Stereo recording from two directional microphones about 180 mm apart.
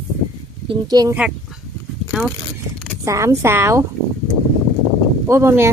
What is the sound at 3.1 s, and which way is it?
Speech, 15° right (ahead or behind).